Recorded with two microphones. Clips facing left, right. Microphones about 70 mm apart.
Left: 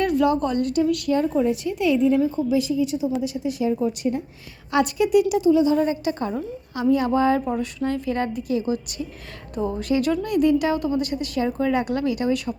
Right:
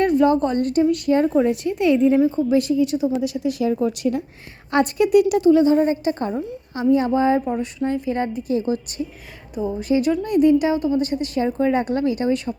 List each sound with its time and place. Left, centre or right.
0.0 s speech: right
1.4 s a woman's voice: right
4.7 s a woman's voice: right
5.7 s speech: right
9.6 s speech: centre
9.9 s speech: right